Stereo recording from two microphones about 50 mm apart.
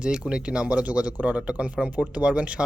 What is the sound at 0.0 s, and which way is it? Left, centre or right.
Speech, centre.